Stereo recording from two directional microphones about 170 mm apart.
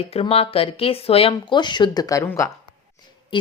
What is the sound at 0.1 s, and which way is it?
Speech, 35° left (ahead or behind).